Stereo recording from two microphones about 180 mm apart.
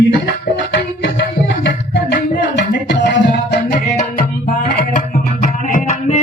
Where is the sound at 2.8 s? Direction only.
75° left (ahead or behind).